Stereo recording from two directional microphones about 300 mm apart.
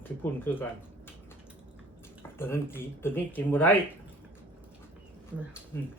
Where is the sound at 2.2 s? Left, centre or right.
Centre.